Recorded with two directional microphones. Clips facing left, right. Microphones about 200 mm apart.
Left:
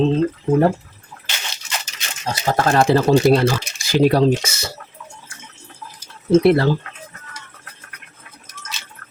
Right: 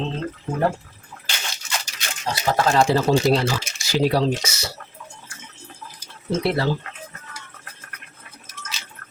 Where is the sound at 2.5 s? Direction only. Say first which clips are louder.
Left 3 dB; 50° left (ahead or behind).